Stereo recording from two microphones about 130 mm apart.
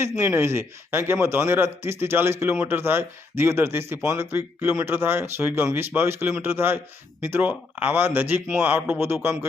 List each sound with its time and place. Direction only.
0.0 s speech: 20° right (ahead or behind)